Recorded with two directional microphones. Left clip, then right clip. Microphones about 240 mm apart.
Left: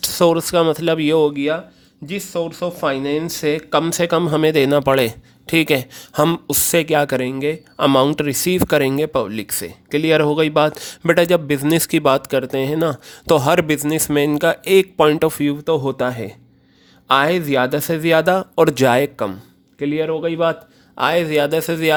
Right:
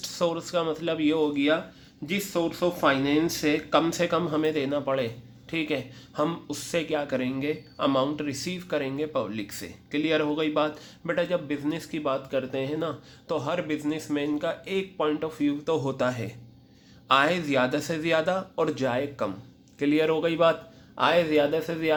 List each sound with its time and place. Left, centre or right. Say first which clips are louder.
0.0 s speech: left 12 dB; left
19.8 s a man's voice: left 4 dB; left